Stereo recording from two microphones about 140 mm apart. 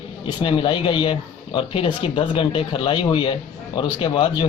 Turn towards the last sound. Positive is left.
turn(degrees=35)  # may be behind; listen again after turning